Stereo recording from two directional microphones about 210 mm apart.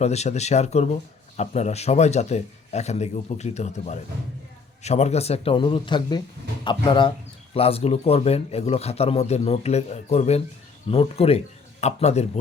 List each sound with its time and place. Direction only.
0.0 s a man's voice: 30° left (ahead or behind)